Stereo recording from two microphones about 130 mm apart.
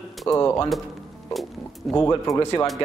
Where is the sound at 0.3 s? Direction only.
25° left (ahead or behind).